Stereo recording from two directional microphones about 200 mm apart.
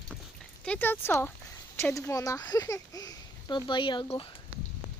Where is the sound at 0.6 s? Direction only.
5° left (ahead or behind); by 4.3 s 25° left (ahead or behind).